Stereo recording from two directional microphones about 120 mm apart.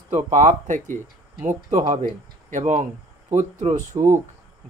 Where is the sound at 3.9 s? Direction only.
30° right (ahead or behind).